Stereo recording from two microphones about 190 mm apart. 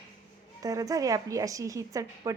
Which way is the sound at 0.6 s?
20° right (ahead or behind).